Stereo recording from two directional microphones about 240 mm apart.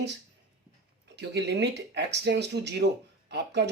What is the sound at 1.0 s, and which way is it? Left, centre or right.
Speech, right.